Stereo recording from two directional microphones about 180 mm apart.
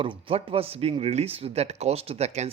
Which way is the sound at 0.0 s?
30° right (ahead or behind).